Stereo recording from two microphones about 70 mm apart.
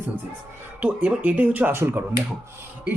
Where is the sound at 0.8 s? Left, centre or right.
Right.